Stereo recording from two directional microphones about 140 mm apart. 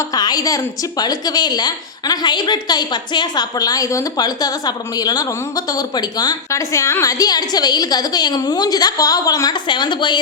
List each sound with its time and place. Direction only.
0.1 s a woman's voice: 30° left (ahead or behind)